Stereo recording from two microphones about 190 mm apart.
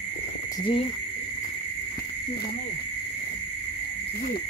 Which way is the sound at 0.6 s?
30° left (ahead or behind).